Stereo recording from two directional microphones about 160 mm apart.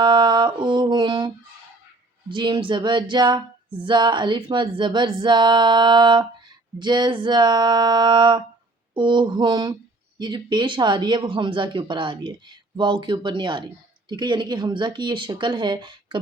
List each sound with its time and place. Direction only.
0.0 s mantra: 30° right (ahead or behind)
2.3 s speech: 30° right (ahead or behind)